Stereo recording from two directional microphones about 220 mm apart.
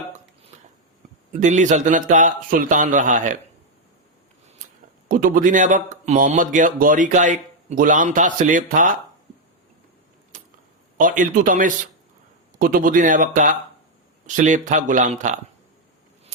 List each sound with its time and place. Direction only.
1.3 s speech: 35° right (ahead or behind)
5.0 s speech: 40° right (ahead or behind)
10.3 s a sound: 35° right (ahead or behind)
10.9 s speech: 35° right (ahead or behind)